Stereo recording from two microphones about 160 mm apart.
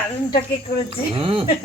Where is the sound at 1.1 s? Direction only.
35° right (ahead or behind).